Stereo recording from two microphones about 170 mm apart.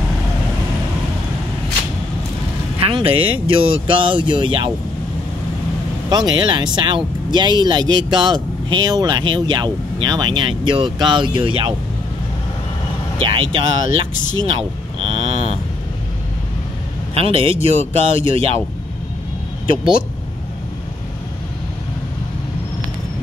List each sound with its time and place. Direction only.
2.8 s speech: 30° right (ahead or behind)
6.0 s speech: 25° right (ahead or behind)
13.2 s speech: 30° right (ahead or behind)
15.0 s a sound: 35° right (ahead or behind)
17.1 s speech: 35° right (ahead or behind)